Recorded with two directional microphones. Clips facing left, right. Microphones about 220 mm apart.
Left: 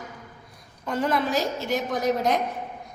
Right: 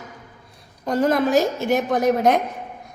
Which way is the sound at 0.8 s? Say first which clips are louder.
Right 6 dB; 40° right (ahead or behind).